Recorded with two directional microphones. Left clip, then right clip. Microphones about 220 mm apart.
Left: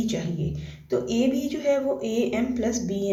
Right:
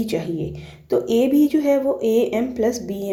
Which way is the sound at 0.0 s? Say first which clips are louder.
Right 6 dB; 30° right (ahead or behind).